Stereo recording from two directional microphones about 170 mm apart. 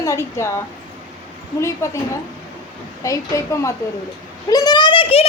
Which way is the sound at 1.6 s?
15° left (ahead or behind).